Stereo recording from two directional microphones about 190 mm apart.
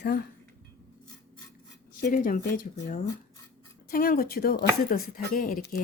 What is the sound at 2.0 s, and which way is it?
Speech, 50° left (ahead or behind).